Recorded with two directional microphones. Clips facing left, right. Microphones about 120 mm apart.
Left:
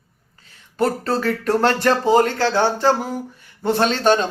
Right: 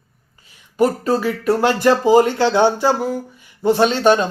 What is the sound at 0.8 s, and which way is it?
A man's voice, 10° right (ahead or behind).